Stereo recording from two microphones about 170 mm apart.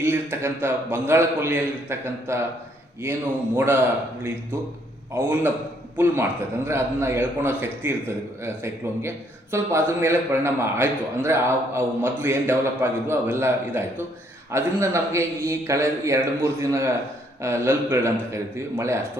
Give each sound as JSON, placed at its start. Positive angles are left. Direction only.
{"t": 0.0, "sound": "a man's voice", "side_deg": -15}